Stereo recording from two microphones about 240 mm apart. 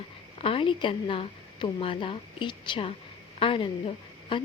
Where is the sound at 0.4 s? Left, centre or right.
Left.